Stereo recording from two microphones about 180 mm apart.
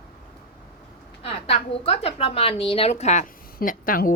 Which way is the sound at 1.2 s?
35° left (ahead or behind).